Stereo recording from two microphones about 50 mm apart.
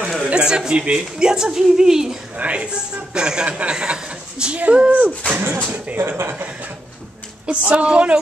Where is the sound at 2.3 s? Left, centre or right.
Right.